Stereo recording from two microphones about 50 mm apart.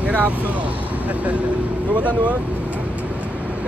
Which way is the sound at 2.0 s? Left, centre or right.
Right.